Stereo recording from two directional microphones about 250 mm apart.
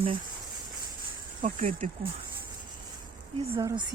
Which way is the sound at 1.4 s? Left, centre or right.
Right.